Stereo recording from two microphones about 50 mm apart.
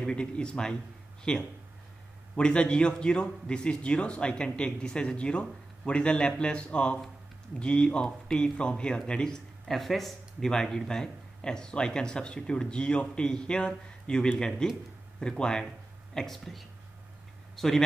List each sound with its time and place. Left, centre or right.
0.0 s a man's voice: centre
9.8 s a man's voice: centre